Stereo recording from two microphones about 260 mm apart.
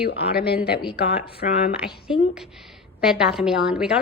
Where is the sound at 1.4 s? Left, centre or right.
Left.